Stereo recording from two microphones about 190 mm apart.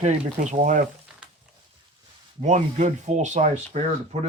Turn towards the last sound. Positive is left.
turn(degrees=-40)  # may be behind; listen again after turning